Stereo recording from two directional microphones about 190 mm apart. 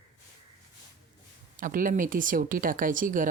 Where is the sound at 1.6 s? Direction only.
45° right (ahead or behind).